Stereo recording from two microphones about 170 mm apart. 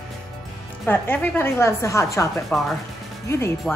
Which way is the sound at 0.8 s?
10° left (ahead or behind).